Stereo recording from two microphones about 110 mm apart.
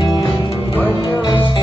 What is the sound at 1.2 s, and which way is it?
Music, 45° left (ahead or behind).